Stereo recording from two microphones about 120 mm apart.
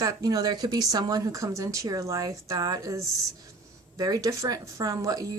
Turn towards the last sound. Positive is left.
turn(degrees=-30)  # may be behind; listen again after turning